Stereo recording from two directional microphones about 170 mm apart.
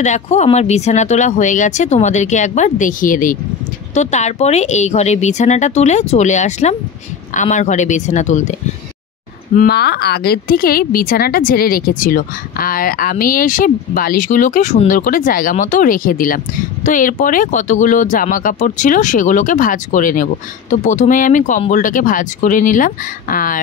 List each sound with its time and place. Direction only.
0.0 s speech: 45° left (ahead or behind)
9.6 s a woman's voice: 70° left (ahead or behind); by 23.6 s 55° left (ahead or behind)